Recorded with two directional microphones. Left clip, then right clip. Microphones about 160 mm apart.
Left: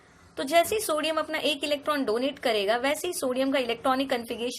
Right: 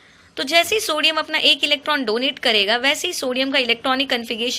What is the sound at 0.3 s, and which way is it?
A woman's voice, 10° right (ahead or behind).